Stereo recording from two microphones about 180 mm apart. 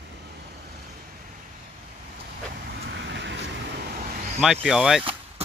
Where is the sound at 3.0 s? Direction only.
75° right (ahead or behind).